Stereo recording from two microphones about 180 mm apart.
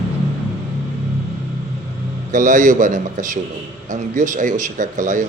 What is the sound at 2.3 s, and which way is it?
Speech, 45° right (ahead or behind).